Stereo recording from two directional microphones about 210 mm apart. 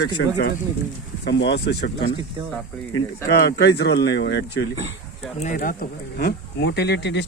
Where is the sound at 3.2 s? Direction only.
50° left (ahead or behind).